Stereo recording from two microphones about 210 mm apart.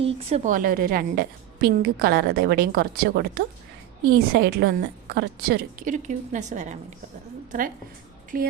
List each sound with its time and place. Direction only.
0.0 s a woman's voice: 30° right (ahead or behind)
8.3 s a woman's voice: 40° right (ahead or behind)